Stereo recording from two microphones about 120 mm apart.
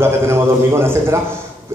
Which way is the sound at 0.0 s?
20° right (ahead or behind).